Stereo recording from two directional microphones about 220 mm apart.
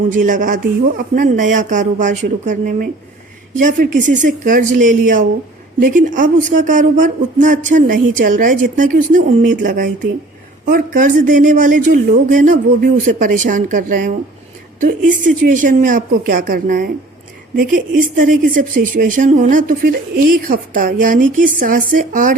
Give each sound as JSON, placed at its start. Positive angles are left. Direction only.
{"t": 0.1, "sound": "speech", "side_deg": -35}